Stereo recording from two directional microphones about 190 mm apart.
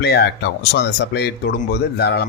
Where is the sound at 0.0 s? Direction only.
60° left (ahead or behind).